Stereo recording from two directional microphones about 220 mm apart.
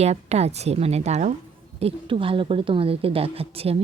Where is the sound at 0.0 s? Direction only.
30° right (ahead or behind).